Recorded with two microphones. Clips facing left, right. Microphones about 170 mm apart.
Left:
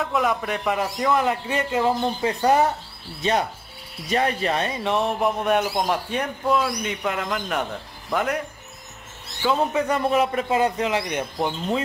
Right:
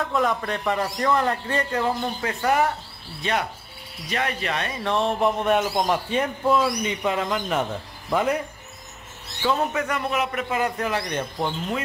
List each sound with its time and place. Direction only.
0.0 s a man's voice: centre (ahead or behind)
1.9 s a man's voice: 20° left (ahead or behind)
4.1 s speech: 35° left (ahead or behind)
4.8 s speech: 15° left (ahead or behind)
5.2 s a man's voice: centre (ahead or behind)
9.5 s speech: 20° left (ahead or behind)
9.9 s a man's voice: 30° left (ahead or behind); by 11.5 s 15° left (ahead or behind)